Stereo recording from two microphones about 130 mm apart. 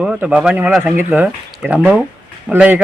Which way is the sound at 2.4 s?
10° right (ahead or behind).